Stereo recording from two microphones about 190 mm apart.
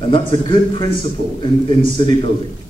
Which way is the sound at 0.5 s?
25° left (ahead or behind).